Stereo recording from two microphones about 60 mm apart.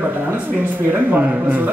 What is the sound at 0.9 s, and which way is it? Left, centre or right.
Speech, right.